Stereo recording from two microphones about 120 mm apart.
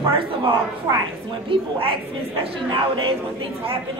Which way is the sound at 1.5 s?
50° right (ahead or behind).